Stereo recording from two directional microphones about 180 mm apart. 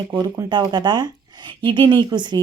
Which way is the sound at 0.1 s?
25° right (ahead or behind).